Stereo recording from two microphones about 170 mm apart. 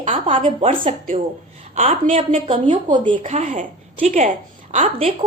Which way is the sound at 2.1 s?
35° right (ahead or behind).